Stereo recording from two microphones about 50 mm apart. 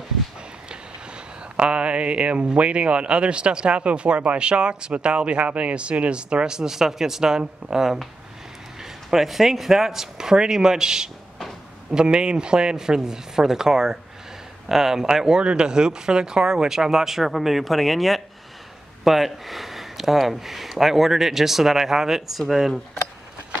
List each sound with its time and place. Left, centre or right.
0.7 s speech: right; by 22.8 s centre